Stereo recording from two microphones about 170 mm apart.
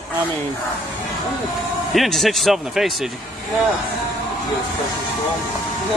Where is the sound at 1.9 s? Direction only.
Centre (ahead or behind).